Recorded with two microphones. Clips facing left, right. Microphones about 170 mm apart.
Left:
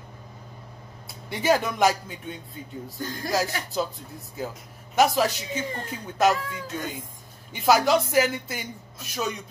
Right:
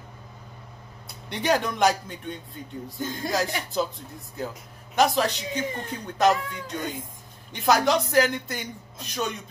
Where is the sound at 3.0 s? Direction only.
20° right (ahead or behind).